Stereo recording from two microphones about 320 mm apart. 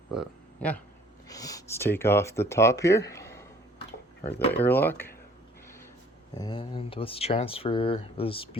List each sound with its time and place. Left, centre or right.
0.1 s speech: centre
4.6 s speech: centre
6.3 s speech: centre